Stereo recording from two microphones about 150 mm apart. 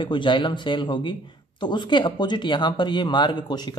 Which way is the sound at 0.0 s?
30° left (ahead or behind).